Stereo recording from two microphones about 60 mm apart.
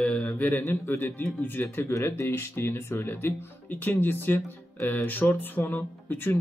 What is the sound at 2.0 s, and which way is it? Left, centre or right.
Speech, left.